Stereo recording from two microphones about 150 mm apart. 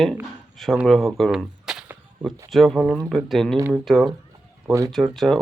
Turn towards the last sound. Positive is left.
turn(degrees=0)  # may be behind; listen again after turning